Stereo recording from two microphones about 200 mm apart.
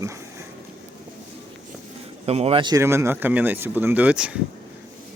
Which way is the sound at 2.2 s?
30° right (ahead or behind).